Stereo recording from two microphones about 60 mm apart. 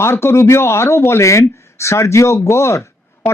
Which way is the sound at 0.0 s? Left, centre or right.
Left.